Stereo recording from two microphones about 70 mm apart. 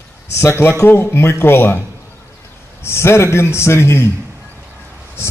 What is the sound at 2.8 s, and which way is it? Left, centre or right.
A man's voice, left.